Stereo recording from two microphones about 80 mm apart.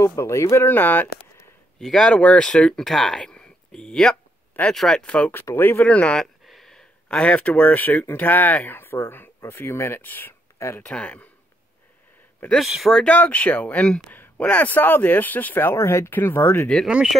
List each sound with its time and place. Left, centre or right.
0.2 s speech: left
0.7 s speech: left
1.8 s speech: centre
5.3 s speech: left
5.9 s speech: centre
6.4 s a sound: centre; by 8.1 s left
8.1 s speech: left
10.8 s speech: centre
12.6 s speech: centre
12.9 s speech: centre; by 16.6 s left
16.8 s speech: centre